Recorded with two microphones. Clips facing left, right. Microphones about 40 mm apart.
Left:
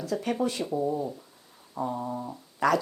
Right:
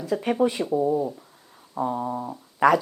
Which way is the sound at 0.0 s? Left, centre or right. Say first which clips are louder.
Right 5 dB; centre.